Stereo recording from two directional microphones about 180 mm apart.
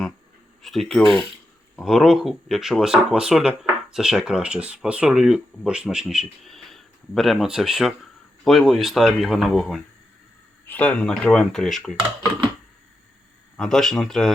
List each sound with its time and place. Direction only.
0.6 s speech: centre (ahead or behind)
11.9 s speech: 25° right (ahead or behind)
13.6 s speech: centre (ahead or behind)